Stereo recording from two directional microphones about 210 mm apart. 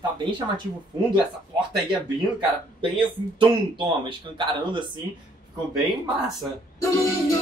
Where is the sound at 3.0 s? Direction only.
25° right (ahead or behind).